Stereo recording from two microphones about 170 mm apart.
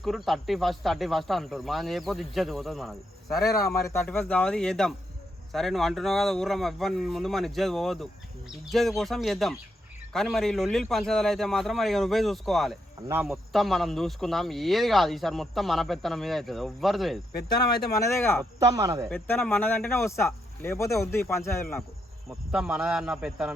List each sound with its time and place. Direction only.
0.0 s speech: centre (ahead or behind)
3.5 s speech: 15° left (ahead or behind); by 12.7 s centre (ahead or behind)
13.0 s speech: 15° right (ahead or behind)
13.2 s speech: centre (ahead or behind)
17.9 s speech: 15° left (ahead or behind)
18.6 s speech: 20° right (ahead or behind)
19.0 s speech: 10° left (ahead or behind)
22.5 s speech: 5° right (ahead or behind)